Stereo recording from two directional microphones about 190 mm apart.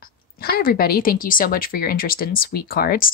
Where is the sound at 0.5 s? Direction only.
50° left (ahead or behind).